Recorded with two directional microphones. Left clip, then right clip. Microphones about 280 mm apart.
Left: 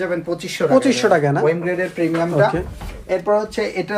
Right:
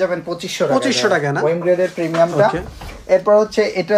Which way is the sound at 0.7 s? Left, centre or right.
Centre.